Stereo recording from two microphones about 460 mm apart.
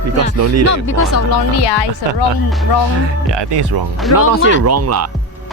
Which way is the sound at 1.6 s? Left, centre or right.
Left.